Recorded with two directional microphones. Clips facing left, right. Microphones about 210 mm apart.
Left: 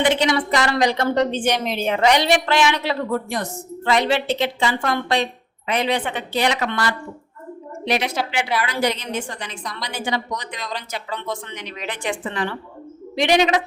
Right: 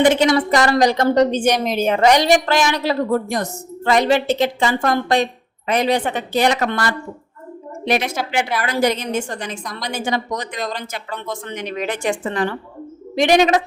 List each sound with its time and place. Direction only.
0.0 s speech: 45° right (ahead or behind)